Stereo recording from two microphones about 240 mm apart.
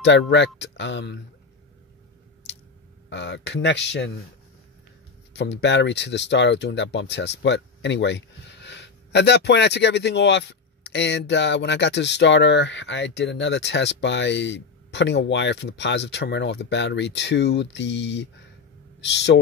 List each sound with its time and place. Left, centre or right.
0.0 s speech: left
3.1 s speech: left
5.3 s speech: left